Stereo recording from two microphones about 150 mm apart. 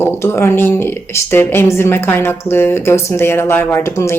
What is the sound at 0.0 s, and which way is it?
Speech, 15° left (ahead or behind).